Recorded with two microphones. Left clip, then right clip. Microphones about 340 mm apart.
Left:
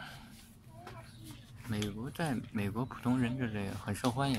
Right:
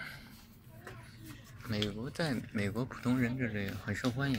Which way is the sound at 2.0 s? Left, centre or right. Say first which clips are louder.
Right 1 dB; centre.